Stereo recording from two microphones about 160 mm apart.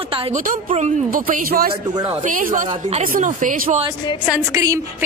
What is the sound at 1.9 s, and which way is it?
Speech, 25° right (ahead or behind).